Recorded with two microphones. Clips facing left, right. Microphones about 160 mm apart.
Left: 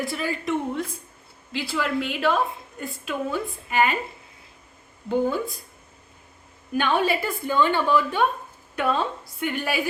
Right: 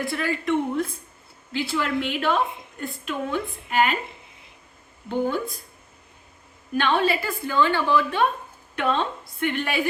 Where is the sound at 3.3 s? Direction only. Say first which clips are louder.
Right 2 dB; 15° left (ahead or behind).